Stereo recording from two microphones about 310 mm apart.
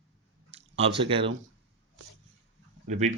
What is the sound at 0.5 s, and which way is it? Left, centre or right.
Speech, centre.